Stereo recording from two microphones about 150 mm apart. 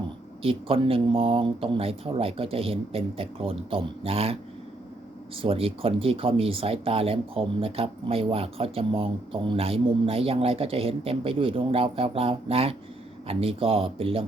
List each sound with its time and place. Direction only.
0.4 s speech: 40° right (ahead or behind)
5.4 s speech: 40° right (ahead or behind)